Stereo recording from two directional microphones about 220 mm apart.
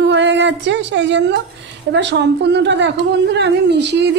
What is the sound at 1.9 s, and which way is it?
A woman's voice, 55° right (ahead or behind).